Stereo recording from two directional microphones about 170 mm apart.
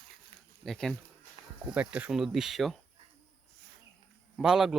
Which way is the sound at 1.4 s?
30° right (ahead or behind).